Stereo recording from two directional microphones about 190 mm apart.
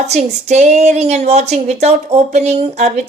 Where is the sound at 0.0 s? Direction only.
35° right (ahead or behind).